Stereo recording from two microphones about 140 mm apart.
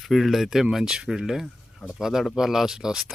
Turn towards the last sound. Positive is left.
turn(degrees=-5)  # may be behind; listen again after turning